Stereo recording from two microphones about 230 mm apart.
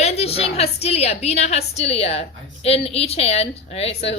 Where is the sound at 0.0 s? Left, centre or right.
Left.